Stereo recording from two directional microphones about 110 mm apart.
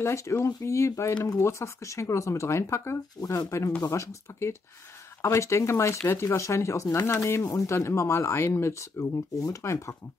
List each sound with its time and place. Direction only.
0.0 s speech: 25° left (ahead or behind)